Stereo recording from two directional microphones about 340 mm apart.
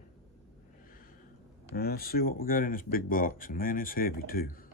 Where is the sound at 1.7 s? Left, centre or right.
Left.